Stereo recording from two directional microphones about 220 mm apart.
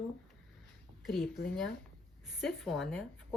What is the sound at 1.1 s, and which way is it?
Speech, centre (ahead or behind).